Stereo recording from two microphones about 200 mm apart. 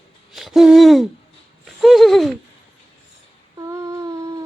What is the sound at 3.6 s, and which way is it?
Humming, 15° right (ahead or behind).